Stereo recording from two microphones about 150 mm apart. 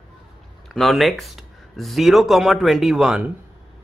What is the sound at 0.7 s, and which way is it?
Speech, centre (ahead or behind).